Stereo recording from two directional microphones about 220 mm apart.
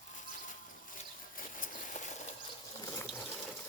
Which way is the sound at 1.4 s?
35° left (ahead or behind).